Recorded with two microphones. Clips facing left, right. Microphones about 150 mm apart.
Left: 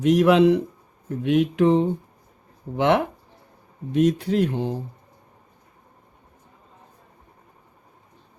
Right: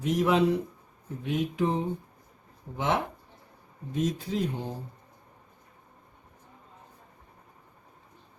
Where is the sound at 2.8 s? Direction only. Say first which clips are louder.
Left 9 dB; 75° left (ahead or behind).